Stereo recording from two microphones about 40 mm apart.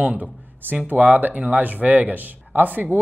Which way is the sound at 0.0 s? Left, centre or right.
Right.